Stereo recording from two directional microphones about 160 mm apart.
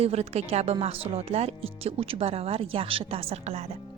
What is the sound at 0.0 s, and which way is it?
A woman's voice, 40° right (ahead or behind).